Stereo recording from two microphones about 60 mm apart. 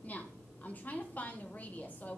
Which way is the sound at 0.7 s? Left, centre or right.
Left.